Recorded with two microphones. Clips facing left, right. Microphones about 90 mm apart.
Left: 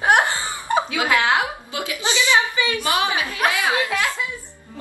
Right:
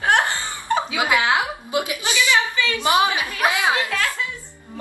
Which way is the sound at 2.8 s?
20° right (ahead or behind).